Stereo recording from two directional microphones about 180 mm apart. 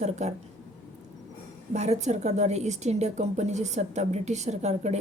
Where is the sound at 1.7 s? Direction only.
40° right (ahead or behind).